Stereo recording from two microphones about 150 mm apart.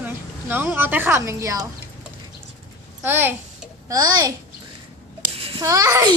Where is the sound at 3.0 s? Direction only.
15° right (ahead or behind).